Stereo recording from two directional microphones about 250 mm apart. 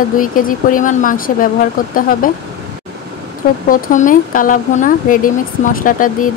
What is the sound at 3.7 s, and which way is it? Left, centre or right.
Speech, left.